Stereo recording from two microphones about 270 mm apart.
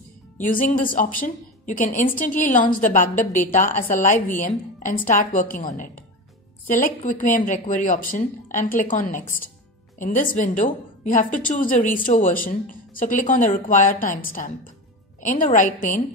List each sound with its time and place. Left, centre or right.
0.4 s a woman's voice: left
6.7 s a woman's voice: left